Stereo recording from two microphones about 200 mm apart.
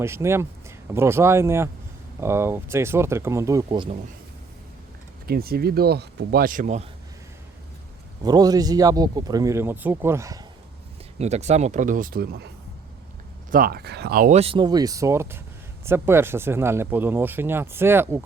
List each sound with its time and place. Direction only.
0.0 s speech: 15° right (ahead or behind)
5.2 s speech: 50° right (ahead or behind)
8.2 s speech: 20° right (ahead or behind)
11.2 s speech: 35° right (ahead or behind); by 12.5 s 50° right (ahead or behind)
13.5 s speech: 45° right (ahead or behind)
14.3 s speech: 25° right (ahead or behind); by 18.2 s 10° right (ahead or behind)